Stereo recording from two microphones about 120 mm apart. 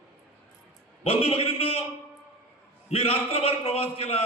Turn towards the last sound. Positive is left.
turn(degrees=55)  # may be behind; listen again after turning